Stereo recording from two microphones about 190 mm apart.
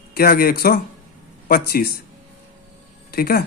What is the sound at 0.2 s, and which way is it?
Speech, 50° left (ahead or behind).